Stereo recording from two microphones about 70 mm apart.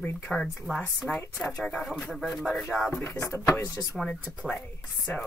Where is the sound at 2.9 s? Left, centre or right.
Left.